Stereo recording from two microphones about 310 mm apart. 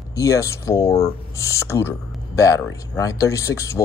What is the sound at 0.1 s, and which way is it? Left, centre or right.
Speech, centre.